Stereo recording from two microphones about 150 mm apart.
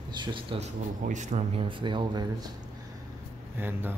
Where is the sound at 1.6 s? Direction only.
35° right (ahead or behind).